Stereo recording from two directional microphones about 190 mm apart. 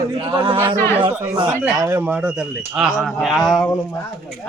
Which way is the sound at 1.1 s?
5° right (ahead or behind).